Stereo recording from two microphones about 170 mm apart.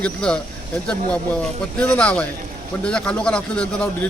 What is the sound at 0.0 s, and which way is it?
Speech, 5° left (ahead or behind).